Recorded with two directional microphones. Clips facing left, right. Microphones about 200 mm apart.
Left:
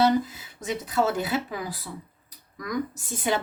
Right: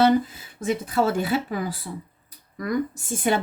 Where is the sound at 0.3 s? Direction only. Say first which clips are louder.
Right 5 dB; 55° right (ahead or behind).